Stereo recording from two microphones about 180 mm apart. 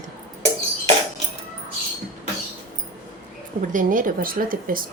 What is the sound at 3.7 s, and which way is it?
Speech, 50° right (ahead or behind).